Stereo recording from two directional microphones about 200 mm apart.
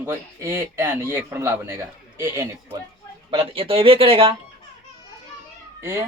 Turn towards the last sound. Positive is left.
turn(degrees=-15)  # may be behind; listen again after turning